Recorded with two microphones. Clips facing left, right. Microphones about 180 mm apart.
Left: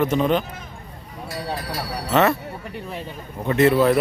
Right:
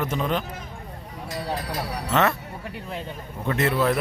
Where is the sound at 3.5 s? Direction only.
Centre (ahead or behind).